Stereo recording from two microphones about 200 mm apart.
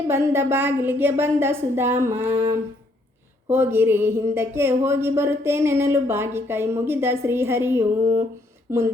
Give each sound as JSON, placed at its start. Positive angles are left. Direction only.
{"t": 0.1, "sound": "speech", "side_deg": -10}
{"t": 3.5, "sound": "speech", "side_deg": -10}